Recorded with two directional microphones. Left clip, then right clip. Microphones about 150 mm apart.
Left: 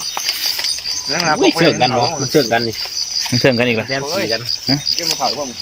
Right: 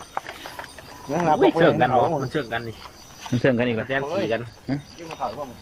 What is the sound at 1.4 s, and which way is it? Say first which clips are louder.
Speech: left 4 dB; 5° left (ahead or behind).